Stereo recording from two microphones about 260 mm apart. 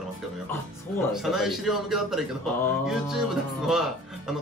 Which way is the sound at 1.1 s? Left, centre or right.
Centre.